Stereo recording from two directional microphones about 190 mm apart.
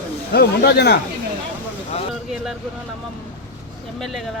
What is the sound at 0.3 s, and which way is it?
Speech, 55° left (ahead or behind).